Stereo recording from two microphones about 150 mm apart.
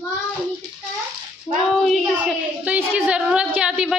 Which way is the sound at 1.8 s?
Centre (ahead or behind).